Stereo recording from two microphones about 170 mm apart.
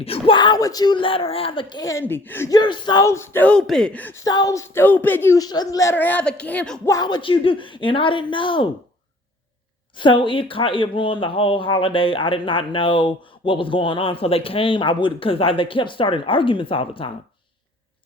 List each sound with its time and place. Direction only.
0.0 s speech: 35° left (ahead or behind); by 2.6 s 15° left (ahead or behind)
2.6 s speech: 25° left (ahead or behind); by 6.9 s 10° left (ahead or behind)
6.9 s speech: 25° left (ahead or behind)
10.0 s speech: 30° left (ahead or behind)